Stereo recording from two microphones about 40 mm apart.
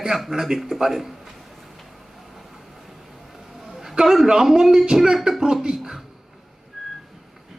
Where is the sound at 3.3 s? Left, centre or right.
Centre.